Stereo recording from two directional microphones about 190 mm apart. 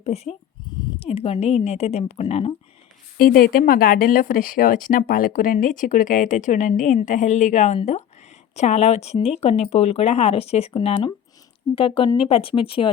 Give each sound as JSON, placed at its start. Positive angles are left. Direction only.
{"t": 0.0, "sound": "speech", "side_deg": 35}
{"t": 3.2, "sound": "speech", "side_deg": 50}